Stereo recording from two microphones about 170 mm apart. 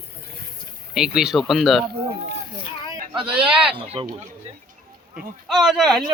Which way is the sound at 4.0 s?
35° right (ahead or behind).